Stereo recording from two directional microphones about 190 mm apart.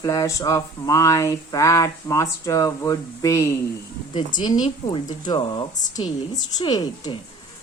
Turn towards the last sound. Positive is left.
turn(degrees=20)  # may be behind; listen again after turning